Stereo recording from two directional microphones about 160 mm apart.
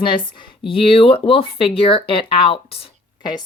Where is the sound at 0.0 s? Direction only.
30° left (ahead or behind).